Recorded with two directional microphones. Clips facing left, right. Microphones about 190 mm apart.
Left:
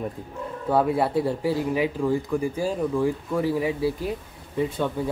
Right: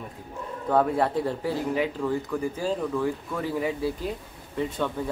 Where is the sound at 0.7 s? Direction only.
10° left (ahead or behind).